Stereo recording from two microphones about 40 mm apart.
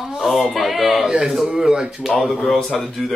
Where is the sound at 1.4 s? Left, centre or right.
Centre.